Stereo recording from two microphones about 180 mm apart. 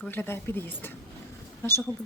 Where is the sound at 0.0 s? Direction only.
10° left (ahead or behind).